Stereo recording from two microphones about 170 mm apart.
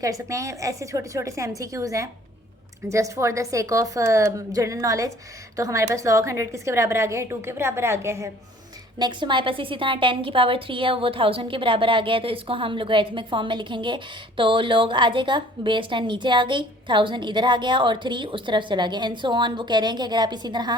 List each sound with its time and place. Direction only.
0.0 s a woman's voice: 20° right (ahead or behind)
9.0 s a woman's voice: 25° right (ahead or behind)